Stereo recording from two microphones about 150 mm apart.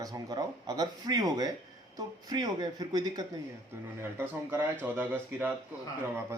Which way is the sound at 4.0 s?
15° right (ahead or behind).